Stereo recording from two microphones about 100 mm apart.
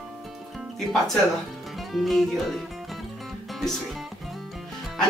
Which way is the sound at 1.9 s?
Centre (ahead or behind).